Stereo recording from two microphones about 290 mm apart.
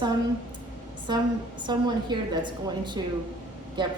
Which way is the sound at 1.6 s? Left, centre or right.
Centre.